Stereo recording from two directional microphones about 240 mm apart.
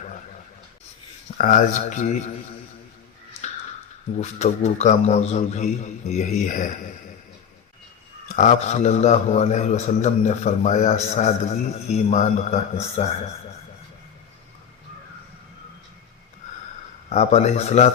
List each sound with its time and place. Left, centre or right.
1.4 s speech: left
4.2 s a man's voice: left
8.4 s a man's voice: left
17.1 s a man's voice: left